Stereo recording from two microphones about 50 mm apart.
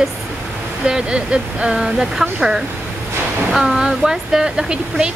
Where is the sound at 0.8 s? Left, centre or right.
Centre.